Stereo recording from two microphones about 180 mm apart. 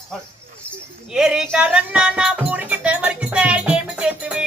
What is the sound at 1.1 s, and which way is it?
Music, 5° right (ahead or behind).